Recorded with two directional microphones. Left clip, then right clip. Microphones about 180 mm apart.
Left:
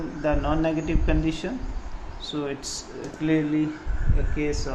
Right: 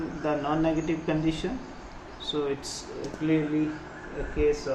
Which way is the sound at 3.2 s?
50° left (ahead or behind).